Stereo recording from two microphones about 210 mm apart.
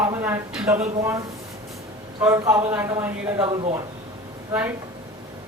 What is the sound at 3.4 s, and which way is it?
Speech, 20° right (ahead or behind).